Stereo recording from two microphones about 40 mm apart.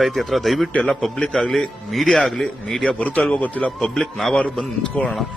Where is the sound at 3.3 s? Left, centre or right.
Left.